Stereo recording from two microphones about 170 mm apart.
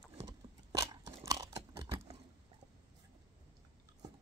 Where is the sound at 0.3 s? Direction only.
20° right (ahead or behind).